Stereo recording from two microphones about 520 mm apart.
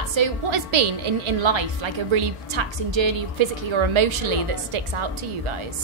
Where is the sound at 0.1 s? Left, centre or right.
Right.